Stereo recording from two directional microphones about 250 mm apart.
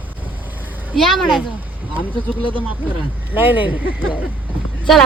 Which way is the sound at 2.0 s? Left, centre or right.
Centre.